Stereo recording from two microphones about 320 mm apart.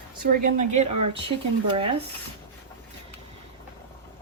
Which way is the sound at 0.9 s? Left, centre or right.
Right.